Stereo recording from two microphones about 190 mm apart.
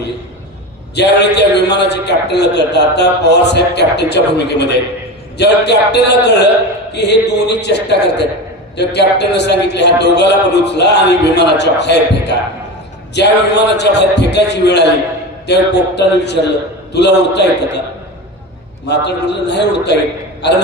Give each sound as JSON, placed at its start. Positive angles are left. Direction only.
{"t": 0.9, "sound": "a man's voice", "side_deg": 60}
{"t": 18.9, "sound": "a man's voice", "side_deg": 65}